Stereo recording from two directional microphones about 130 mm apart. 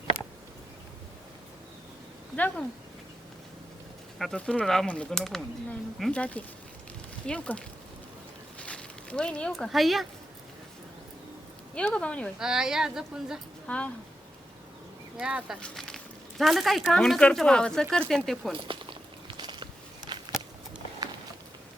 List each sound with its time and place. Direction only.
2.3 s speech: 10° left (ahead or behind)
4.2 s speech: 5° left (ahead or behind)
11.7 s speech: 5° left (ahead or behind)
12.4 s speech: 5° right (ahead or behind)
13.7 s speech: 10° left (ahead or behind)
15.2 s speech: 10° right (ahead or behind)
15.6 s speech: 5° left (ahead or behind)
18.5 s a sound: 40° right (ahead or behind)